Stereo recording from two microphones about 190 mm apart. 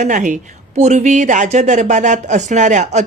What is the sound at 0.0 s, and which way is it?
Speech, 40° right (ahead or behind).